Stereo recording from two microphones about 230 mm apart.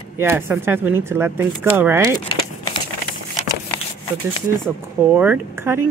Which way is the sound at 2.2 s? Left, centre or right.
Left.